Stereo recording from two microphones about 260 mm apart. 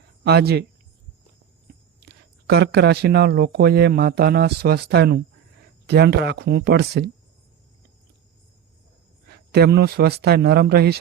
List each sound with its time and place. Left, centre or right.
0.3 s speech: right
2.0 s speech: right
9.3 s speech: right